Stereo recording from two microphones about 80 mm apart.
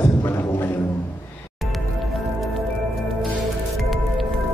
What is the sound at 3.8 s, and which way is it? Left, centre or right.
Music, centre.